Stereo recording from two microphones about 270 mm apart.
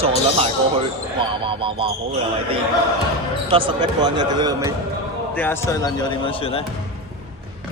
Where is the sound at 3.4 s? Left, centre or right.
Centre.